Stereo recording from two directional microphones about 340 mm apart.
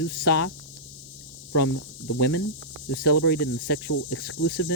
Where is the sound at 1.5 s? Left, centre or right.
Left.